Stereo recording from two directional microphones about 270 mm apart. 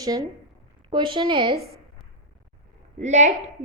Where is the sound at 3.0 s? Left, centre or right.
Right.